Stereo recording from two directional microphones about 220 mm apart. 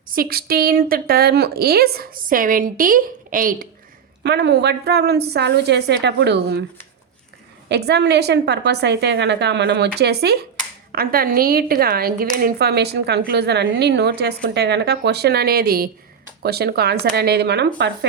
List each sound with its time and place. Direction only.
0.1 s a woman's voice: 45° right (ahead or behind)
4.2 s speech: 50° right (ahead or behind)
7.7 s speech: 50° right (ahead or behind)